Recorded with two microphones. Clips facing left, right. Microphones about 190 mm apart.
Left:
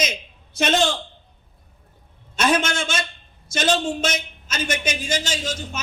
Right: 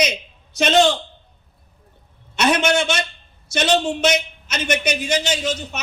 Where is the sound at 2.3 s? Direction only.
70° right (ahead or behind).